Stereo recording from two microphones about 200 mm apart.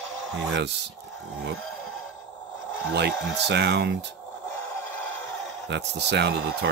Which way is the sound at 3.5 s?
55° right (ahead or behind).